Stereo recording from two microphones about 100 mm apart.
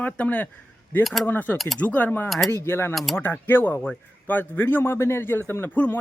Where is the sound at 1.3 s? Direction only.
20° left (ahead or behind).